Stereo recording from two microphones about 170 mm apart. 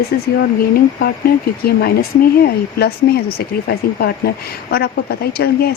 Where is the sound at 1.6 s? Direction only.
65° left (ahead or behind).